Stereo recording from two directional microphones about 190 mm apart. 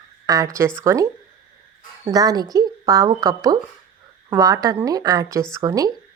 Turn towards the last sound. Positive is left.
turn(degrees=-20)  # may be behind; listen again after turning